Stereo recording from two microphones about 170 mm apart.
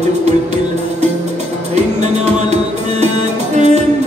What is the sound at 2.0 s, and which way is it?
Music, 40° right (ahead or behind).